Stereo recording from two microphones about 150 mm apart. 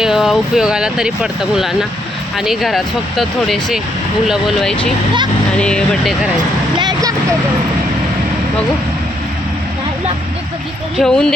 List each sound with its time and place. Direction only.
0.0 s speech: centre (ahead or behind)
6.7 s vehicle: 30° right (ahead or behind)
10.9 s speech: 5° left (ahead or behind)